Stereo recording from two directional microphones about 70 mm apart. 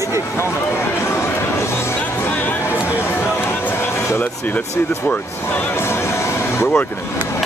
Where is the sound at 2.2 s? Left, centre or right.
Left.